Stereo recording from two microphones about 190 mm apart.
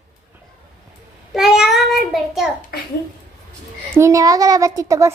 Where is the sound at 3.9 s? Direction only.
15° right (ahead or behind).